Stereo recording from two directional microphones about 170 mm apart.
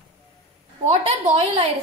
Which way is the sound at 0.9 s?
35° right (ahead or behind).